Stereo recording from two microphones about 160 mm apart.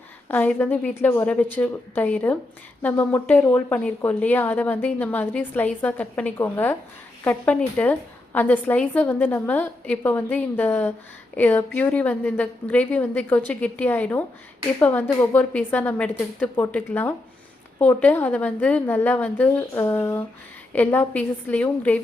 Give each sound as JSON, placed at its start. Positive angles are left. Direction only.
{"t": 0.3, "sound": "a woman's voice", "side_deg": 10}